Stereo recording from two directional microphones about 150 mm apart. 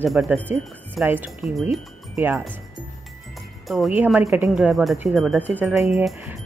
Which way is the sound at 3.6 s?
Centre (ahead or behind).